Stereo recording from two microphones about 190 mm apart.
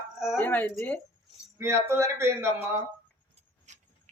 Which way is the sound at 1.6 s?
15° right (ahead or behind).